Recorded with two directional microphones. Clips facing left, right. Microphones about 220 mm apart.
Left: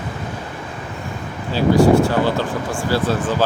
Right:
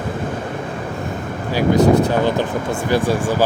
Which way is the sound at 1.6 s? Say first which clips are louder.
Left 1 dB; 20° right (ahead or behind).